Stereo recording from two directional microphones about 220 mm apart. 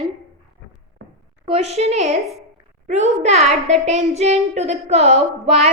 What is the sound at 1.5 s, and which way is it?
A woman's voice, 30° right (ahead or behind).